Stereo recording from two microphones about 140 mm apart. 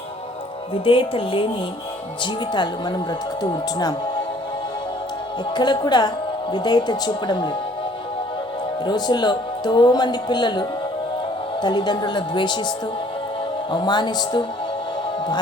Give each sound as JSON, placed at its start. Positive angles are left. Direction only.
{"t": 0.7, "sound": "speech", "side_deg": 40}
{"t": 5.5, "sound": "speech", "side_deg": 30}
{"t": 8.8, "sound": "speech", "side_deg": 30}